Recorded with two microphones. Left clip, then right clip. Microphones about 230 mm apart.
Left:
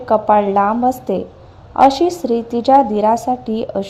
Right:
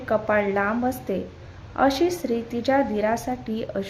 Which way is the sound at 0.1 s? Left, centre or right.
Centre.